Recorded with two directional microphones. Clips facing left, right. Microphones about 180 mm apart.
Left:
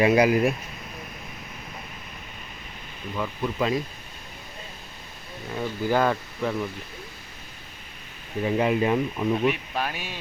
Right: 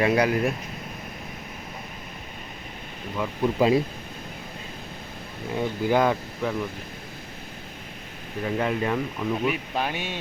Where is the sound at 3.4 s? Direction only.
25° right (ahead or behind).